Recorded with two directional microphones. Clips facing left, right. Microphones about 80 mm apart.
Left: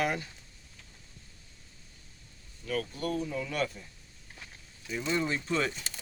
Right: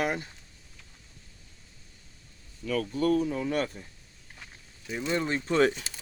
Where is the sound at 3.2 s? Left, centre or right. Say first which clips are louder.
Right 4 dB; right.